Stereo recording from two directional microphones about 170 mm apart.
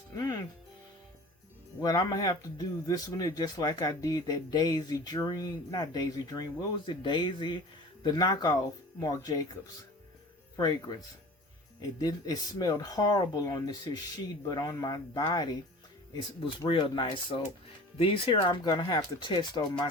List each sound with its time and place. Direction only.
0.2 s music: 25° left (ahead or behind)
1.8 s a man's voice: 20° left (ahead or behind)
10.6 s a man's voice: 25° left (ahead or behind)
16.6 s a man's voice: 30° left (ahead or behind)